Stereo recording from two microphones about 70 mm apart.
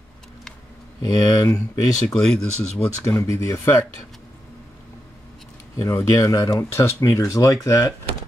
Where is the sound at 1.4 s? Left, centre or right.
Left.